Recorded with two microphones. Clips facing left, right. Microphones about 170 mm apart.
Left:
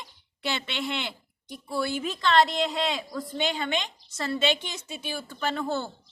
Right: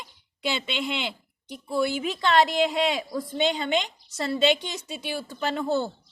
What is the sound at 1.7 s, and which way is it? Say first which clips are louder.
A woman's voice: right 3 dB; 15° right (ahead or behind).